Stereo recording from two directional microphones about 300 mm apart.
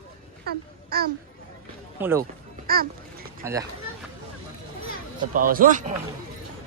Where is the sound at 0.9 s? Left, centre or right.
Right.